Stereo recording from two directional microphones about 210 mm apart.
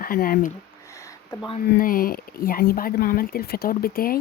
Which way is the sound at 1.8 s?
40° left (ahead or behind).